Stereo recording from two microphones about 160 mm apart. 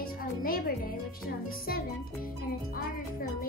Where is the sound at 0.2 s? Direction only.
65° left (ahead or behind).